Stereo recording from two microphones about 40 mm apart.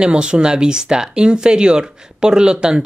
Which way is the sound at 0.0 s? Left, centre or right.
Right.